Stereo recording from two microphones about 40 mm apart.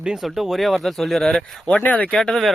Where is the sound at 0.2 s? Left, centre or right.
Centre.